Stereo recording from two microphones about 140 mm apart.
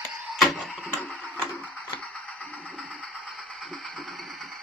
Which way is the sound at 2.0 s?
10° left (ahead or behind).